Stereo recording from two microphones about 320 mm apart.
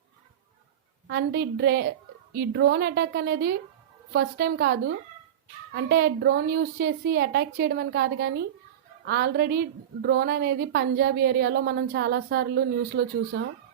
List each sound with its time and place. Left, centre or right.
1.0 s a woman's voice: right